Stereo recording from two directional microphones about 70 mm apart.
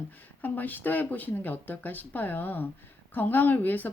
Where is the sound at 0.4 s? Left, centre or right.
Left.